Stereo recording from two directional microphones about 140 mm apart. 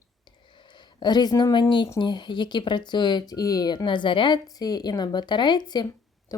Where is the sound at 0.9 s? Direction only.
30° left (ahead or behind).